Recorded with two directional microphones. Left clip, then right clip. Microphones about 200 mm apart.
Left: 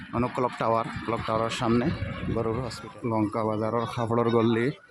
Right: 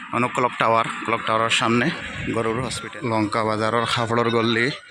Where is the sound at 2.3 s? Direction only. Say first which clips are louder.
Right 5 dB; 20° right (ahead or behind).